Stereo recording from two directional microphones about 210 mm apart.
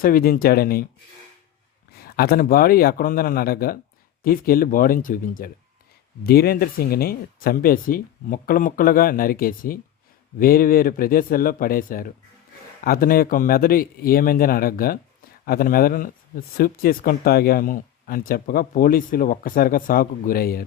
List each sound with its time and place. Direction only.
0.0 s speech: 45° left (ahead or behind)
2.1 s speech: 45° left (ahead or behind)